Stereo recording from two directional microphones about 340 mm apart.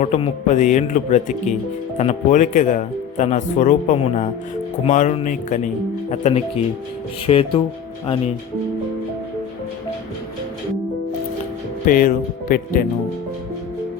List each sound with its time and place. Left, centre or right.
0.0 s speech: centre
11.9 s speech: left